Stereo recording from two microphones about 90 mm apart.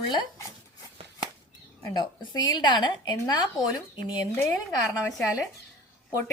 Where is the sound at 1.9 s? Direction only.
50° left (ahead or behind).